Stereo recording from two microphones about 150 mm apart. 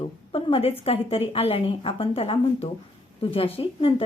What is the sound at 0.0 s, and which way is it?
A woman's voice, 35° left (ahead or behind).